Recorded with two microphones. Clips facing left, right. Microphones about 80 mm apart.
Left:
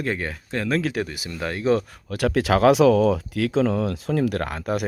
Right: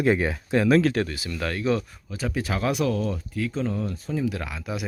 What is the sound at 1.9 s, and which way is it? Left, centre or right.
Speech, left.